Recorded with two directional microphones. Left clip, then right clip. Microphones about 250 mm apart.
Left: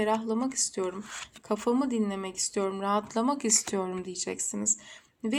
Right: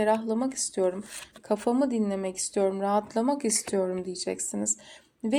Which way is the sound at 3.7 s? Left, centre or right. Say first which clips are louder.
Right 4 dB; centre.